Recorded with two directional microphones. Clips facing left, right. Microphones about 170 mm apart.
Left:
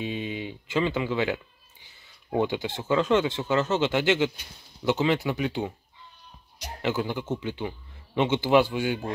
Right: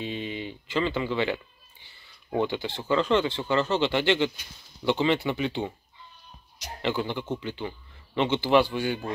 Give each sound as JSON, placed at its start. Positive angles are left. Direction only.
{"t": 0.0, "sound": "speech", "side_deg": 10}
{"t": 6.8, "sound": "speech", "side_deg": 5}